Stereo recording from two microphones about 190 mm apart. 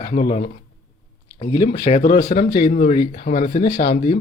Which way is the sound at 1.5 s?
25° left (ahead or behind).